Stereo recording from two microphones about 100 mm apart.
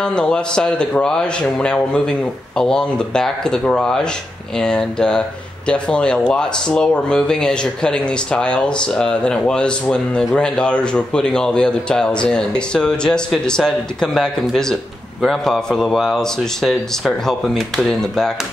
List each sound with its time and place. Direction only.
0.0 s speech: 10° left (ahead or behind)